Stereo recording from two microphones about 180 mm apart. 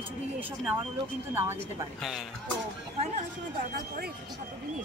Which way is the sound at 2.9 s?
40° right (ahead or behind).